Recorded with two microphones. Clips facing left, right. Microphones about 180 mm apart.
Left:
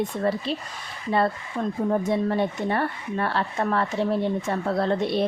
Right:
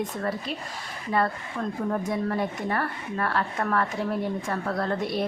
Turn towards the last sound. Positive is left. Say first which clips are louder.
# left 4 dB
turn(degrees=25)  # may be behind; listen again after turning